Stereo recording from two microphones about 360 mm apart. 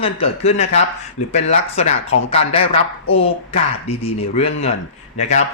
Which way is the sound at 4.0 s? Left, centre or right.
Centre.